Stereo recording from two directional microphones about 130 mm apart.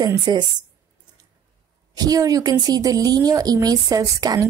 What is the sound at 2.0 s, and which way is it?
A woman's voice, 30° right (ahead or behind).